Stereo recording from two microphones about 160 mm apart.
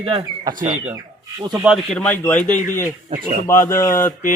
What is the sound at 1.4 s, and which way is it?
Speech, 25° right (ahead or behind).